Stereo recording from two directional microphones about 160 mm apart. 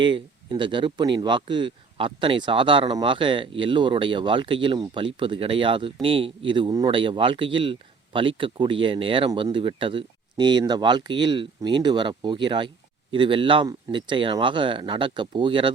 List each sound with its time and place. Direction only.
0.0 s speech: 30° right (ahead or behind)